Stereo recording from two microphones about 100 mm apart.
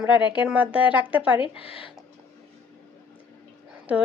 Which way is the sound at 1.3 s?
65° left (ahead or behind).